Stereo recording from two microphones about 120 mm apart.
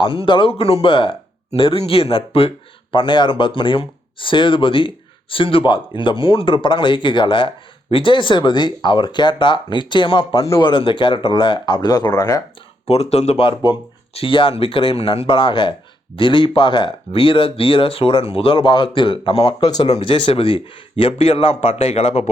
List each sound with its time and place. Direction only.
0.0 s speech: 45° left (ahead or behind); by 12.2 s 30° left (ahead or behind)
12.9 s speech: 60° left (ahead or behind); by 20.0 s 35° left (ahead or behind)
20.0 s speech: 50° left (ahead or behind)